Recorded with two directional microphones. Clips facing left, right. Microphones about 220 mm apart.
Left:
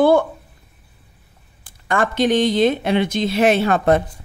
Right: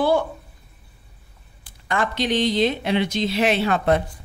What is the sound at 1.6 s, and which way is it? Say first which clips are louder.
Speech: left 4 dB; 50° left (ahead or behind).